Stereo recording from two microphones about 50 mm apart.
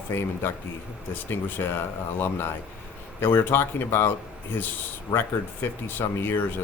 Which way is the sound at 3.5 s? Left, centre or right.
Left.